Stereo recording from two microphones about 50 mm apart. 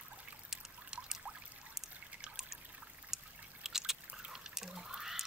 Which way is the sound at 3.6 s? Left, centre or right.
Centre.